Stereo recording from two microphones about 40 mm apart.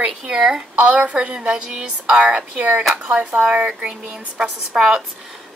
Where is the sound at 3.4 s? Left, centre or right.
Right.